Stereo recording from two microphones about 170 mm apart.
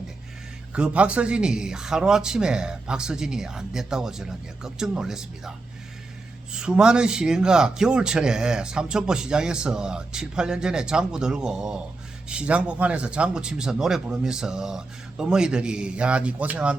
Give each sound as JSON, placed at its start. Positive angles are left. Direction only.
{"t": 0.7, "sound": "a man's voice", "side_deg": -5}